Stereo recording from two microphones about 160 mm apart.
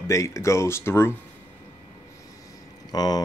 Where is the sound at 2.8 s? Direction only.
25° left (ahead or behind).